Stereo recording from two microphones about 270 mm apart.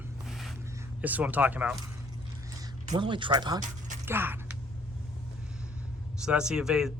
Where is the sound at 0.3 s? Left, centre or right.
Centre.